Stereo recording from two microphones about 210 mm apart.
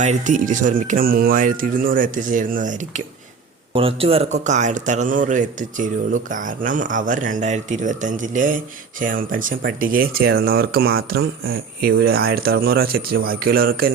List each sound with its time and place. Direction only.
0.0 s speech: 35° right (ahead or behind)
3.7 s speech: 25° right (ahead or behind); by 13.9 s 45° right (ahead or behind)